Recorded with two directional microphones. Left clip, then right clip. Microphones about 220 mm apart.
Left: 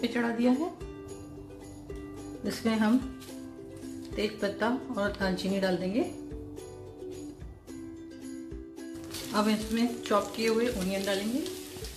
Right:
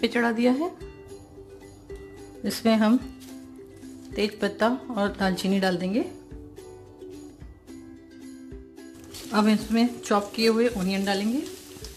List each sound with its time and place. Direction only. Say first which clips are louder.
0.0 s a woman's voice: right 6 dB; 35° right (ahead or behind)
2.4 s a woman's voice: right 7 dB; 35° right (ahead or behind)
4.1 s a woman's voice: right 4 dB; 35° right (ahead or behind)
9.3 s speech: right 5 dB; 45° right (ahead or behind)